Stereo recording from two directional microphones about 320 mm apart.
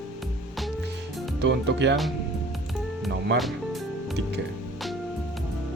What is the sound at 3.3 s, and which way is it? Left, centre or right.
Speech, centre.